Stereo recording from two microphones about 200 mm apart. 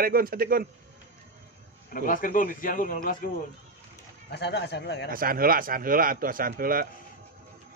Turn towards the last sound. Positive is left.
turn(degrees=-45)  # may be behind; listen again after turning